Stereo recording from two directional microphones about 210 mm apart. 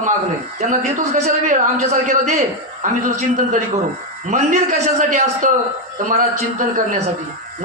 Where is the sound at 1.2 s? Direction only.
35° right (ahead or behind).